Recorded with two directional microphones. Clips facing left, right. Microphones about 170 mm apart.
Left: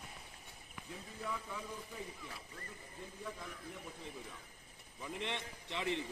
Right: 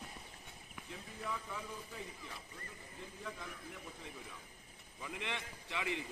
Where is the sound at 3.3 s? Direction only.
Centre (ahead or behind).